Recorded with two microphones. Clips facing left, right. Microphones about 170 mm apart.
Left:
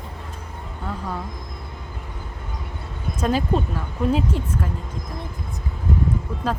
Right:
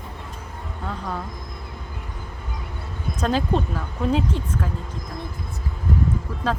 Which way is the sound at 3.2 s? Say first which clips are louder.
Left 1 dB; 5° left (ahead or behind).